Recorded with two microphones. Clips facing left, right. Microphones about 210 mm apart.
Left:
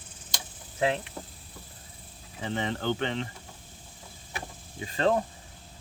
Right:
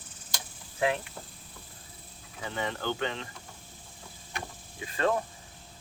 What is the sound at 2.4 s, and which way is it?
Speech, 30° left (ahead or behind).